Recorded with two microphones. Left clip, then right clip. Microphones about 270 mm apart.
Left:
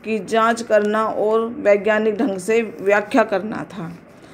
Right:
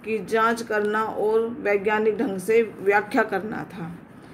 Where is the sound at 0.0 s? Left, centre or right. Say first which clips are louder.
Left 4 dB; centre.